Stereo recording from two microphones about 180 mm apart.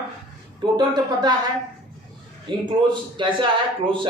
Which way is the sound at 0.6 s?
25° right (ahead or behind).